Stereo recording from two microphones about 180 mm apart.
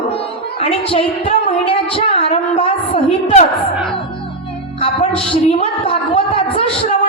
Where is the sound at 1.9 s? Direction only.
35° left (ahead or behind).